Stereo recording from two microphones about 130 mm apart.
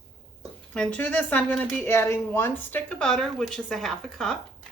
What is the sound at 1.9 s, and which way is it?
Speech, 20° left (ahead or behind).